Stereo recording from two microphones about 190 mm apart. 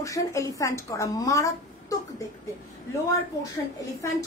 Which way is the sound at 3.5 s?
15° left (ahead or behind).